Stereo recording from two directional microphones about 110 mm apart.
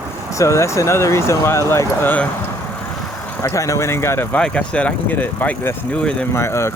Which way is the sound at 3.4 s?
30° left (ahead or behind).